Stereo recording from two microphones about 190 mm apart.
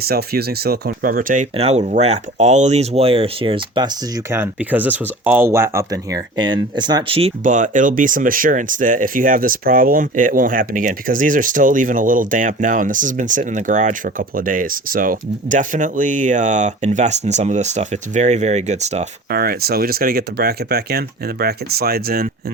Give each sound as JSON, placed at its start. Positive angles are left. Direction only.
{"t": 0.1, "sound": "speech", "side_deg": -55}
{"t": 7.4, "sound": "speech", "side_deg": -40}
{"t": 19.3, "sound": "speech", "side_deg": -55}